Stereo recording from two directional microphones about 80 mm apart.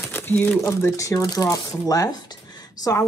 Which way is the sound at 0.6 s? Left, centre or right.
Left.